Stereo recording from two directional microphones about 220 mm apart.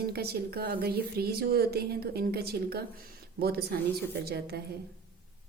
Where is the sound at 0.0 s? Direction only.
45° right (ahead or behind).